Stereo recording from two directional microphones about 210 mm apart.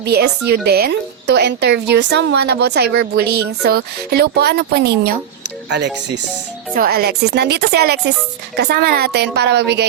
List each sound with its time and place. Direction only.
0.0 s a woman's voice: 50° right (ahead or behind)